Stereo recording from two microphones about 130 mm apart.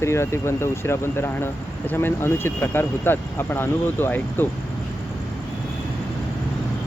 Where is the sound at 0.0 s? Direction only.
20° left (ahead or behind).